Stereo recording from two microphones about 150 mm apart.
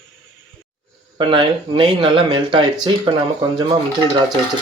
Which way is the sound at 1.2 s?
35° right (ahead or behind).